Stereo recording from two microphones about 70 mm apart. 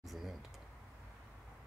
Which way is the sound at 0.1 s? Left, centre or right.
Centre.